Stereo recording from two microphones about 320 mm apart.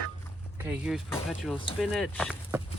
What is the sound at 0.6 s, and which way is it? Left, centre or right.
Speech, centre.